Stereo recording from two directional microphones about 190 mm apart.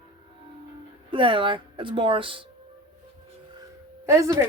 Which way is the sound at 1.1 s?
25° right (ahead or behind).